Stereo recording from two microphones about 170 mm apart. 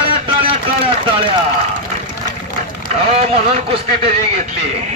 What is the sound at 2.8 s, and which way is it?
A man's voice, 40° right (ahead or behind).